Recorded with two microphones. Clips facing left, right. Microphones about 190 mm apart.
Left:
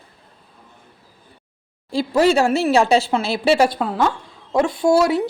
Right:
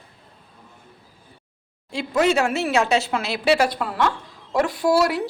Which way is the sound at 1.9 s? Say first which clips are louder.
Left 4 dB; 35° left (ahead or behind).